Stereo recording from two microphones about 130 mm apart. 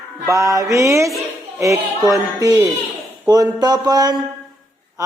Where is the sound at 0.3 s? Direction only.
25° right (ahead or behind).